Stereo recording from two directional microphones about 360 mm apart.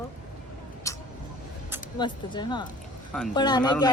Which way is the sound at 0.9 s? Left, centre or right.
Centre.